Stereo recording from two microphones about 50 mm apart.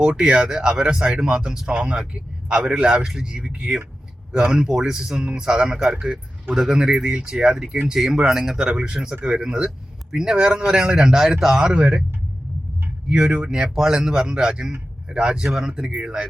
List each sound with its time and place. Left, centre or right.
0.0 s speech: centre
11.6 s speech: right
13.1 s speech: centre